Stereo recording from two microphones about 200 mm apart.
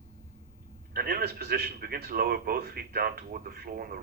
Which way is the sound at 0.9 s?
50° right (ahead or behind).